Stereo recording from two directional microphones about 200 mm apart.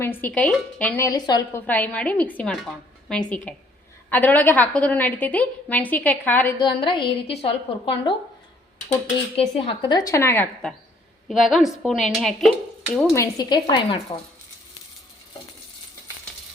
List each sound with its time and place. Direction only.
0.0 s a woman's voice: 10° left (ahead or behind)
6.6 s a woman's voice: 25° left (ahead or behind)
9.3 s a woman's voice: 30° left (ahead or behind)
10.1 s a woman's voice: 15° left (ahead or behind)
13.1 s a woman's voice: 20° left (ahead or behind)